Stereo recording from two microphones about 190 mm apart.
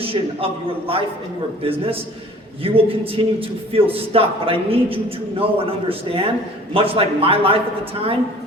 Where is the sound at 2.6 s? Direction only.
30° right (ahead or behind).